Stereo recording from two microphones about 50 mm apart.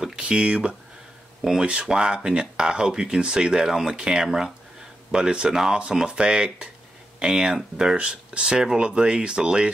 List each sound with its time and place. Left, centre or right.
0.0 s speech: centre